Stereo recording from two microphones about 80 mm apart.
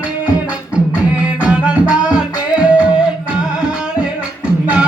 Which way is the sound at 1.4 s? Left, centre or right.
Centre.